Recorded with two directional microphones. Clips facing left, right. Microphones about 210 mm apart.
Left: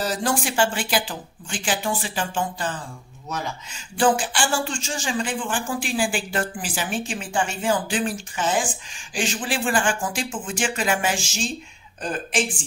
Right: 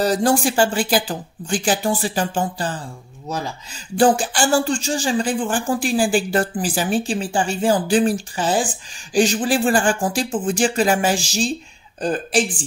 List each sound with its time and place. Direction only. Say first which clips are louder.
0.0 s speech: right 7 dB; 40° right (ahead or behind)